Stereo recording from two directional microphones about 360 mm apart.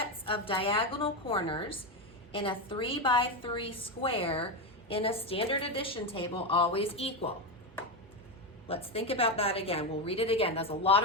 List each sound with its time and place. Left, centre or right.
0.0 s a woman's voice: centre
8.6 s a woman's voice: centre